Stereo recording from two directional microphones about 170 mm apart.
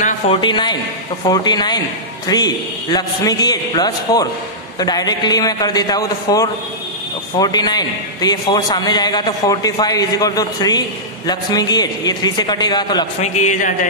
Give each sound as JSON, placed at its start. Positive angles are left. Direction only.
{"t": 0.3, "sound": "a man's voice", "side_deg": 25}
{"t": 13.2, "sound": "speech", "side_deg": 45}